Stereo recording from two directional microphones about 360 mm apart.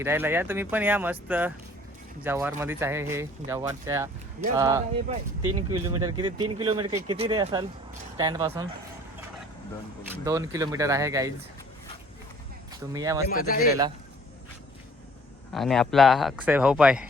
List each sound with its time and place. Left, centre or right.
0.0 s speech: centre
5.4 s speech: right
5.7 s speech: centre
10.2 s speech: centre
12.9 s speech: centre
13.2 s speech: left
15.5 s speech: centre